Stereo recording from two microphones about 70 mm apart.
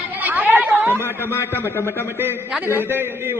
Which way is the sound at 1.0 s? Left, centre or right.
Left.